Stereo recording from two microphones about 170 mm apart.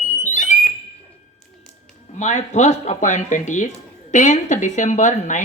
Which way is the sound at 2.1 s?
45° left (ahead or behind).